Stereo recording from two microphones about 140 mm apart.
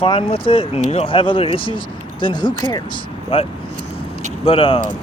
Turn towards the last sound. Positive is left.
turn(degrees=40)  # may be behind; listen again after turning